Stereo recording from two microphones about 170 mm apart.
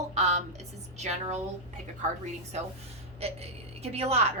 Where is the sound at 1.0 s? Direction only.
45° right (ahead or behind).